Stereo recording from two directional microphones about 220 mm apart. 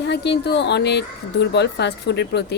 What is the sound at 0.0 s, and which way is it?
Speech, 50° left (ahead or behind).